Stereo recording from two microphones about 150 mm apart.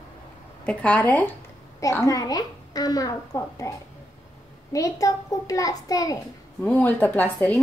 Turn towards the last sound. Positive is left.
turn(degrees=10)  # may be behind; listen again after turning